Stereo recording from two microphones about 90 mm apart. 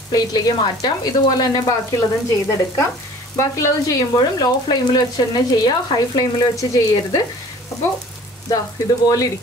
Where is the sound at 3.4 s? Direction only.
40° left (ahead or behind).